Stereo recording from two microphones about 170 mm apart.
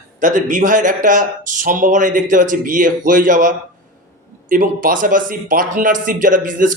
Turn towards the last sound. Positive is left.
turn(degrees=-50)  # may be behind; listen again after turning